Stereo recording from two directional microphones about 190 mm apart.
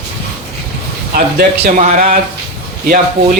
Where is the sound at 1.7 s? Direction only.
40° right (ahead or behind).